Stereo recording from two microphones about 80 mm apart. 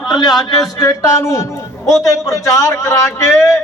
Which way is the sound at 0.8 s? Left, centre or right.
Left.